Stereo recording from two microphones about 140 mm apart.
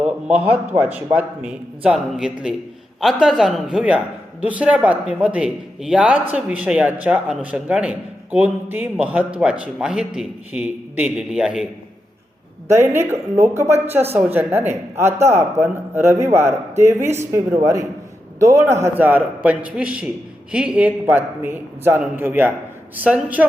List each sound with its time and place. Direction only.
0.0 s a woman's voice: 10° right (ahead or behind)
12.6 s a woman's voice: 20° right (ahead or behind)